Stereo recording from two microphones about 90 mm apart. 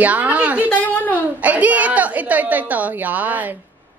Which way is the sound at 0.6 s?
20° left (ahead or behind).